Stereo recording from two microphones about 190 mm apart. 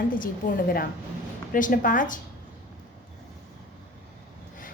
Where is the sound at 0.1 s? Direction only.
45° left (ahead or behind).